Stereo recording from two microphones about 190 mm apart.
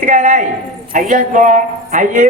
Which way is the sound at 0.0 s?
40° right (ahead or behind).